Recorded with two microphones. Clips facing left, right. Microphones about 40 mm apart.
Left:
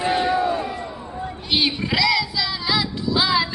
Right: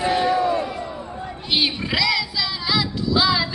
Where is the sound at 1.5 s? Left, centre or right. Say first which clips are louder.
Even; centre.